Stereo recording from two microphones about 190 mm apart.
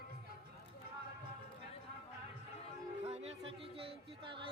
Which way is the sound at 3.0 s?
35° right (ahead or behind).